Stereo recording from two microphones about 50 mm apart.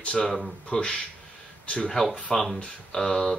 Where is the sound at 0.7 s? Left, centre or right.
Left.